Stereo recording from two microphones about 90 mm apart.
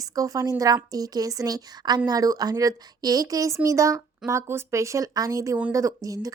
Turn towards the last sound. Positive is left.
turn(degrees=-40)  # may be behind; listen again after turning